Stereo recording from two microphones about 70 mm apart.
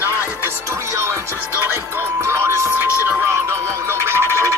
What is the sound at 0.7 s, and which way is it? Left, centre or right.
Music, right.